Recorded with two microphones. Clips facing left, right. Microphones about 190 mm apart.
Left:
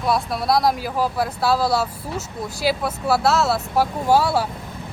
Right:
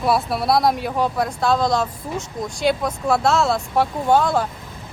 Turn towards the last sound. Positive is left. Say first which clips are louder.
# right 1 dB
turn(degrees=10)  # may be behind; listen again after turning